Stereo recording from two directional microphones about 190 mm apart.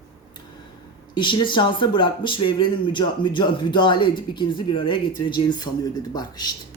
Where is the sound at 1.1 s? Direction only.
25° left (ahead or behind).